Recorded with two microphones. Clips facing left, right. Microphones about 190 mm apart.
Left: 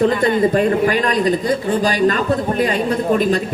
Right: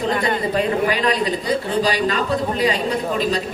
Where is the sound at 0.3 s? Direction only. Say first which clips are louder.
Left 5 dB; 50° left (ahead or behind).